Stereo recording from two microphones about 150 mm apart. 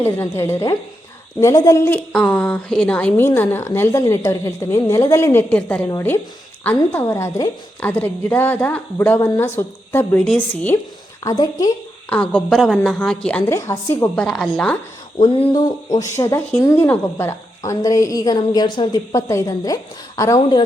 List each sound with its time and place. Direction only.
0.0 s a woman's voice: 15° left (ahead or behind)
7.1 s a woman's voice: 20° left (ahead or behind)
11.2 s speech: 25° left (ahead or behind)
12.0 s a woman's voice: 10° left (ahead or behind)
13.5 s a woman's voice: 20° left (ahead or behind)
14.3 s a woman's voice: 5° left (ahead or behind)
15.6 s speech: 25° left (ahead or behind)